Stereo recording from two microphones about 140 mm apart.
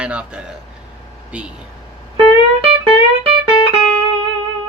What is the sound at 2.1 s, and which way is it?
Music, 40° right (ahead or behind).